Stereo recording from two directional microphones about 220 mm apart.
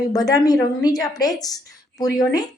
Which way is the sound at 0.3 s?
15° left (ahead or behind).